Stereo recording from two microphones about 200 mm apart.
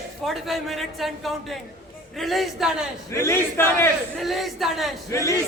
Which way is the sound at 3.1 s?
15° left (ahead or behind).